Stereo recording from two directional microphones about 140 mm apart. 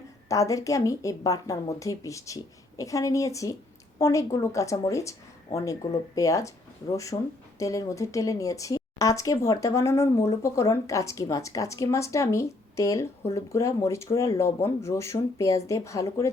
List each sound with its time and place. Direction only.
0.3 s speech: 25° left (ahead or behind)
6.1 s speech: 25° left (ahead or behind)